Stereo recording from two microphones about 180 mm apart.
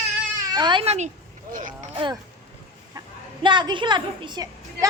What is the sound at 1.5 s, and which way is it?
Speech, 50° right (ahead or behind).